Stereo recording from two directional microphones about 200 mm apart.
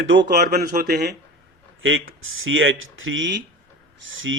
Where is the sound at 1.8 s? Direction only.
80° right.